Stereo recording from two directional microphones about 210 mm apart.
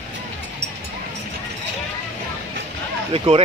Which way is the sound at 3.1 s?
25° right (ahead or behind).